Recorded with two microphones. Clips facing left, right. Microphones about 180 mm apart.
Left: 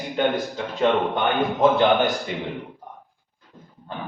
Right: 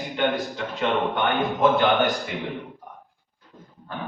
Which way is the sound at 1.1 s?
20° left (ahead or behind).